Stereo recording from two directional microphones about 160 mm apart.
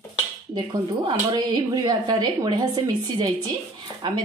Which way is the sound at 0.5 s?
25° right (ahead or behind).